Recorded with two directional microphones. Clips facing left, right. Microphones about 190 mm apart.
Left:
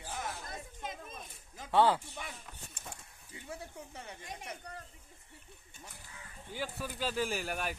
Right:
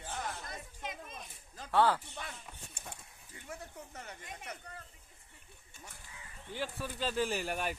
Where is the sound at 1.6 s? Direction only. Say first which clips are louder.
Left 2 dB; 15° left (ahead or behind).